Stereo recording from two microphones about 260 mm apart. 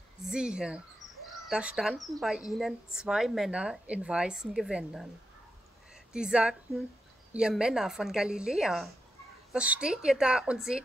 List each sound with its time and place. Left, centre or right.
0.2 s speech: centre
6.1 s speech: centre